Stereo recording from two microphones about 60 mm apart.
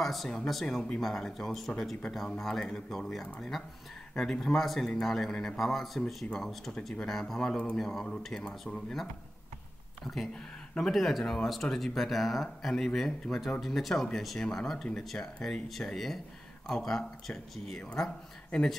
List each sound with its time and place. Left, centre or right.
0.0 s speech: centre
10.0 s speech: centre